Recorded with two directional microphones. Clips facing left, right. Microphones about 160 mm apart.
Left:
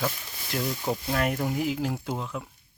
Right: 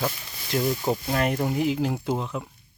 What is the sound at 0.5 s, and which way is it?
Speech, centre (ahead or behind).